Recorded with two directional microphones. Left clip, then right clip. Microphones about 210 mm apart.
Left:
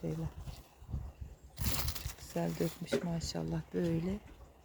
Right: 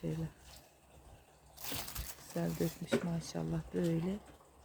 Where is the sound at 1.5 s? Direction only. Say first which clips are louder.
Left 4 dB; 10° left (ahead or behind).